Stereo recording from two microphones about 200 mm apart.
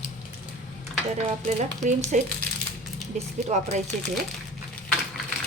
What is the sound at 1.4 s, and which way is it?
Speech, 40° right (ahead or behind).